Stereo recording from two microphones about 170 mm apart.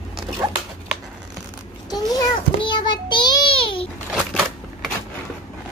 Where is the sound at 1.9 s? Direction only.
25° left (ahead or behind).